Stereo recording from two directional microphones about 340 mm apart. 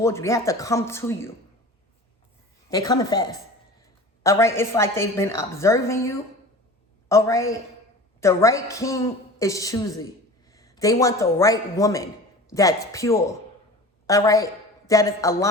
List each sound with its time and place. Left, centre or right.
0.0 s a woman's voice: centre
2.6 s a woman's voice: centre